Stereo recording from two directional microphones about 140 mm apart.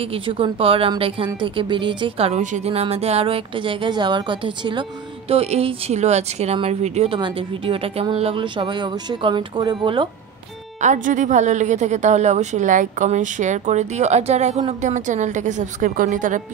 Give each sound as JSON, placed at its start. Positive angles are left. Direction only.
{"t": 0.3, "sound": "a woman's voice", "side_deg": -40}
{"t": 5.3, "sound": "a woman's voice", "side_deg": -45}
{"t": 10.8, "sound": "a woman's voice", "side_deg": -60}